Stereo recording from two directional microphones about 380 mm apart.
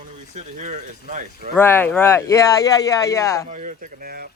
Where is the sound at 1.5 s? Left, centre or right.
Centre.